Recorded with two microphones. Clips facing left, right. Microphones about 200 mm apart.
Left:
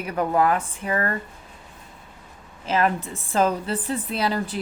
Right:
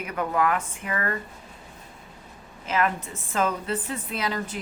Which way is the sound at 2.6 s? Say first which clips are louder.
Left 3 dB; 30° left (ahead or behind).